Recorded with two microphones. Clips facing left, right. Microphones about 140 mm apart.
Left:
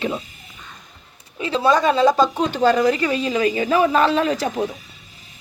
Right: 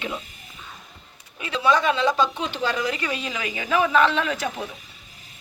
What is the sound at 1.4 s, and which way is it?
Speech, 35° left (ahead or behind).